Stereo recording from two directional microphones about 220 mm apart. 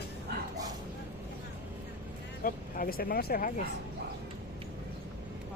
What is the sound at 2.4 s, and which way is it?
Speech, 40° left (ahead or behind).